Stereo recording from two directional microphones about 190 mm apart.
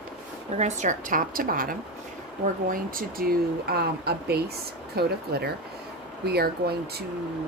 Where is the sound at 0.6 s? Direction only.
40° right (ahead or behind); by 7.1 s 55° right (ahead or behind).